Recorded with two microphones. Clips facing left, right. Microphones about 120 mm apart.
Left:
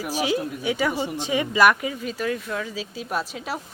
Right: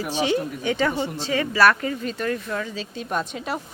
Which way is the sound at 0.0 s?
5° left (ahead or behind).